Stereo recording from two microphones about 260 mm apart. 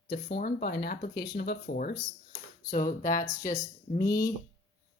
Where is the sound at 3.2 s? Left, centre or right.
Centre.